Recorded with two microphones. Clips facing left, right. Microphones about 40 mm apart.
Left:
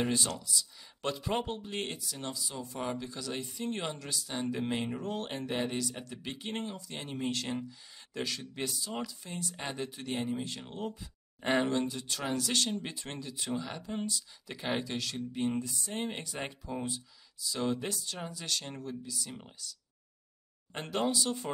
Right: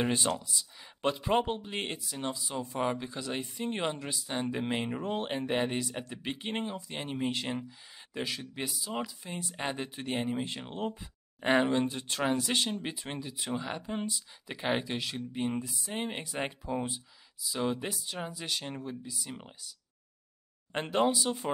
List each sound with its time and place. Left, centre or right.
0.0 s speech: right
12.3 s speech: right
20.8 s speech: right